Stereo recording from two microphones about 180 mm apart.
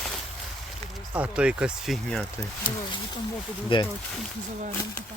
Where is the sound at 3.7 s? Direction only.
30° left (ahead or behind).